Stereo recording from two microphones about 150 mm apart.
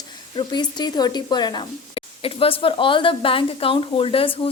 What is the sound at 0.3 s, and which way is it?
A woman's voice, 30° left (ahead or behind).